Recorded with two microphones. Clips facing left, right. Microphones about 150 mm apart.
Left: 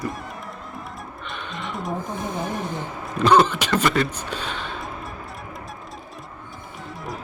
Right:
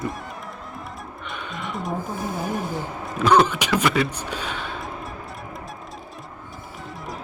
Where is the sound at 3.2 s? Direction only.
10° right (ahead or behind).